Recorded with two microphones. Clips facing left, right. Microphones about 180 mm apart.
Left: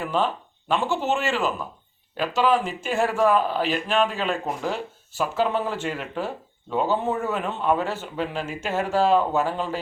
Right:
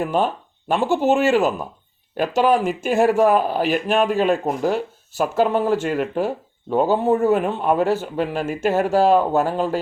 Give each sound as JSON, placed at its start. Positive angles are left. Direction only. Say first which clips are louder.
{"t": 0.0, "sound": "speech", "louder": "right 4 dB", "side_deg": -45}